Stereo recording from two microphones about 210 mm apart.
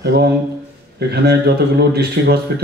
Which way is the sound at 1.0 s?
50° right (ahead or behind).